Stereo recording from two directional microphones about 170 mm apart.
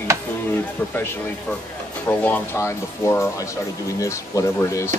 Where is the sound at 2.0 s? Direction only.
10° left (ahead or behind).